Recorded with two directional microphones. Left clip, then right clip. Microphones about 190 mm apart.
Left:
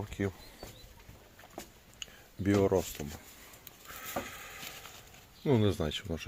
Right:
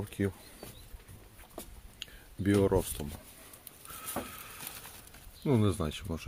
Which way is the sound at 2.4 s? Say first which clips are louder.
Even; 15° right (ahead or behind).